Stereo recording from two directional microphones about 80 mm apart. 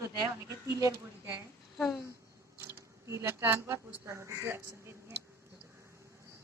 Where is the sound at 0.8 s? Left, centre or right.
Right.